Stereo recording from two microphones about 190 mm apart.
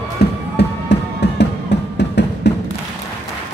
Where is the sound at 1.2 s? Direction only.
65° left (ahead or behind).